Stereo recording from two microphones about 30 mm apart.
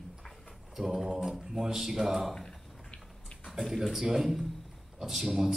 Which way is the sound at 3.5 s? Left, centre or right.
Centre.